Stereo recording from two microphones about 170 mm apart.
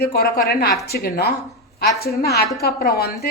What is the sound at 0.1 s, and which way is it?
A woman's voice, 65° left (ahead or behind).